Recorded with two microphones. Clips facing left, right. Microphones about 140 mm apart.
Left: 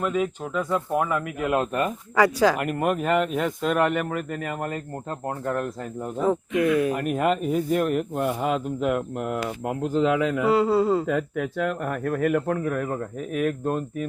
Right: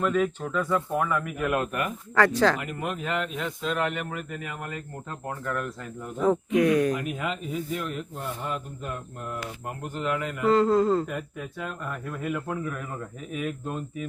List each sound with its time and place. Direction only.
0.0 s a man's voice: 10° left (ahead or behind); by 1.9 s 25° left (ahead or behind)
2.1 s a man's voice: 10° left (ahead or behind)
2.6 s speech: 55° left (ahead or behind)
5.5 s speech: 35° left (ahead or behind)
6.2 s speech: centre (ahead or behind)
6.9 s speech: 50° left (ahead or behind); by 10.2 s 90° left
10.4 s a man's voice: 10° left (ahead or behind)
11.1 s speech: 90° left; by 14.1 s 50° left (ahead or behind)